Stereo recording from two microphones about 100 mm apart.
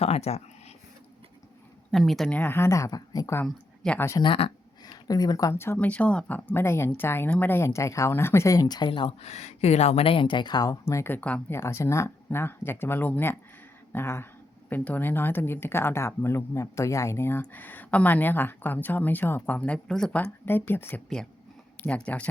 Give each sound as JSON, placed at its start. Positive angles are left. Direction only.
{"t": 0.0, "sound": "speech", "side_deg": 90}
{"t": 1.9, "sound": "speech", "side_deg": 0}
{"t": 2.3, "sound": "speech", "side_deg": 20}
{"t": 3.9, "sound": "speech", "side_deg": 25}
{"t": 4.2, "sound": "speech", "side_deg": 65}
{"t": 4.8, "sound": "a sound", "side_deg": 40}
{"t": 5.5, "sound": "speech", "side_deg": 20}
{"t": 8.9, "sound": "speech", "side_deg": 65}
{"t": 10.8, "sound": "speech", "side_deg": 25}
{"t": 11.5, "sound": "speech", "side_deg": 25}
{"t": 20.4, "sound": "speech", "side_deg": 20}